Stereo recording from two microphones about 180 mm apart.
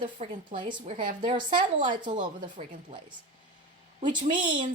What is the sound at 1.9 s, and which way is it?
A woman's voice, 25° right (ahead or behind).